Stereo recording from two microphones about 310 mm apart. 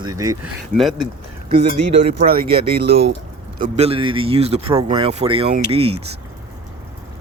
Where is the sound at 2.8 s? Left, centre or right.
Right.